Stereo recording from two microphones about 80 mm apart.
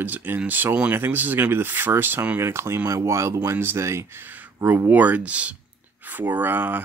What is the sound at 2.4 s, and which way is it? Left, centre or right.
Speech, right.